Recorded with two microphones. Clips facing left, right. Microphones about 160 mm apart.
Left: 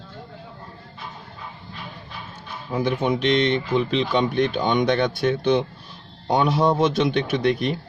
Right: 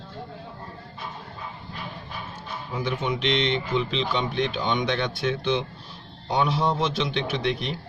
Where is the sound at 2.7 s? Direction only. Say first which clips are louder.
Left 6 dB; 50° left (ahead or behind).